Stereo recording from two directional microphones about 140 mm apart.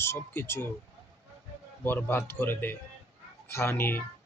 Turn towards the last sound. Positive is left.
turn(degrees=15)  # may be behind; listen again after turning